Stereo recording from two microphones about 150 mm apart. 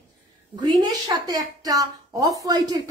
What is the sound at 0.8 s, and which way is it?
A woman's voice, 25° right (ahead or behind).